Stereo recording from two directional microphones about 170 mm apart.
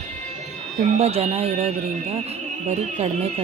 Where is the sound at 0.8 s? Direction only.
40° right (ahead or behind).